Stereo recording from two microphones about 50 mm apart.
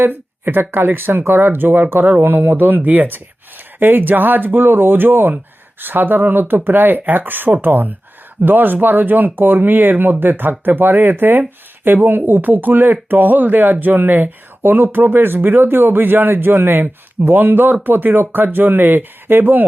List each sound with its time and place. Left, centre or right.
0.0 s speech: right